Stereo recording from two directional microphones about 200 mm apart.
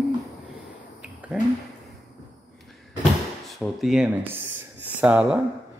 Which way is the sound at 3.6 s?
Centre (ahead or behind).